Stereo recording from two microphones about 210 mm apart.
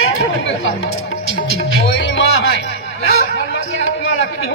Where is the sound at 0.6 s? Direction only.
70° left (ahead or behind).